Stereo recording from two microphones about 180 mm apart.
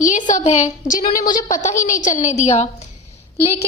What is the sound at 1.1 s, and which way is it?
Speech, 20° left (ahead or behind).